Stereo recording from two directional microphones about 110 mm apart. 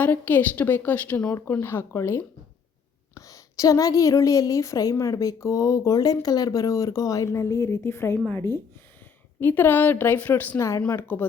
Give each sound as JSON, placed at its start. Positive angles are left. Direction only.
{"t": 0.0, "sound": "a woman's voice", "side_deg": 15}
{"t": 10.6, "sound": "speech", "side_deg": 25}
{"t": 10.8, "sound": "a woman's voice", "side_deg": 15}